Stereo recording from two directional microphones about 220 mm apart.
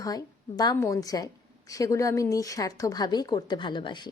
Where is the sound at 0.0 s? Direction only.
15° left (ahead or behind).